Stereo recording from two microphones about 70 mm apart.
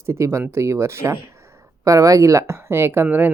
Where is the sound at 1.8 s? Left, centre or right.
Right.